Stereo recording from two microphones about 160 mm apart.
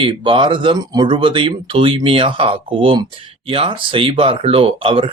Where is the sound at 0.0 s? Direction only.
30° right (ahead or behind).